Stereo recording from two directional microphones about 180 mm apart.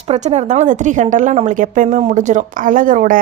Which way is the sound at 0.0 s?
35° right (ahead or behind).